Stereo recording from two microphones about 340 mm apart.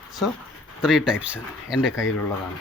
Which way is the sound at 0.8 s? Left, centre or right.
Centre.